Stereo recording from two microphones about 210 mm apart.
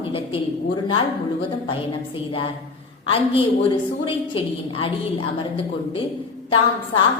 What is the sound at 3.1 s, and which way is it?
A woman's voice, 25° left (ahead or behind).